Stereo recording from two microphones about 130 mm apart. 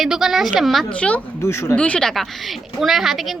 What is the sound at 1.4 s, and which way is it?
Speech, 20° left (ahead or behind).